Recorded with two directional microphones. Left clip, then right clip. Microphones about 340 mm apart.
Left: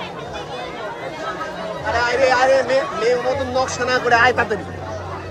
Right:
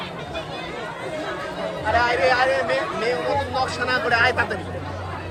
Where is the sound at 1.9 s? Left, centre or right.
Left.